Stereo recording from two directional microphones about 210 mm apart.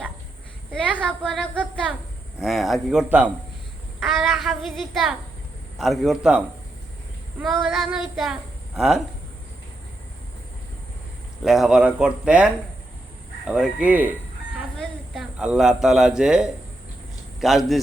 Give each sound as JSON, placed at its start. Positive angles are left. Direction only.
{"t": 1.0, "sound": "a man's voice", "side_deg": 5}
{"t": 4.0, "sound": "child singing", "side_deg": 0}
{"t": 5.7, "sound": "a man's voice", "side_deg": 0}
{"t": 11.4, "sound": "a man's voice", "side_deg": 0}